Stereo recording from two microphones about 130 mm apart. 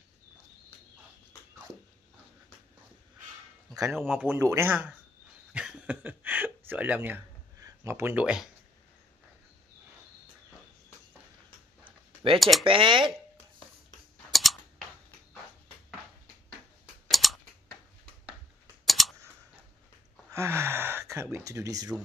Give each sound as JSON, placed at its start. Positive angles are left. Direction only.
{"t": 4.2, "sound": "a man's voice", "side_deg": -20}
{"t": 5.5, "sound": "a sound", "side_deg": -10}
{"t": 11.8, "sound": "a sound", "side_deg": -40}
{"t": 12.4, "sound": "speech", "side_deg": 0}
{"t": 12.6, "sound": "speech", "side_deg": -40}
{"t": 14.3, "sound": "scissors", "side_deg": 0}
{"t": 17.1, "sound": "scissors", "side_deg": 0}
{"t": 18.9, "sound": "a sound", "side_deg": 0}
{"t": 20.3, "sound": "gasp", "side_deg": -20}